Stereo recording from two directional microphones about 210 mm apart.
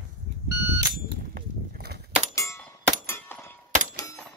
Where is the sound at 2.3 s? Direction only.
15° left (ahead or behind).